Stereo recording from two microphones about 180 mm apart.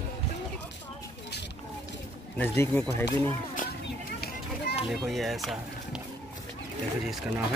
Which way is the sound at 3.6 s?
45° left (ahead or behind).